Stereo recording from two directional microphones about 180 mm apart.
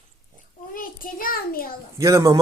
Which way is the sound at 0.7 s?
50° left (ahead or behind).